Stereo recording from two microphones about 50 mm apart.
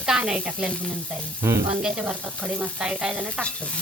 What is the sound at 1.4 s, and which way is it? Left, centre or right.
Sizzle, right.